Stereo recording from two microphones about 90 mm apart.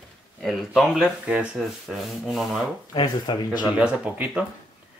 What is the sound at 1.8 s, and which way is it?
Speech, centre (ahead or behind).